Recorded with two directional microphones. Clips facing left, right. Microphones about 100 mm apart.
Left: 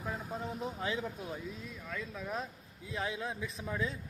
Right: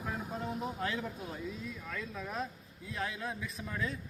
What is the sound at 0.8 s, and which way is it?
Speech, 10° left (ahead or behind).